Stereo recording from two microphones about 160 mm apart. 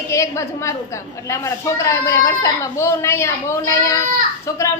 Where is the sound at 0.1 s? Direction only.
20° left (ahead or behind).